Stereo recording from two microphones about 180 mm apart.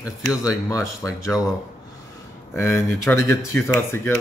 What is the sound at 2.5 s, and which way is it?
Speech, 15° left (ahead or behind).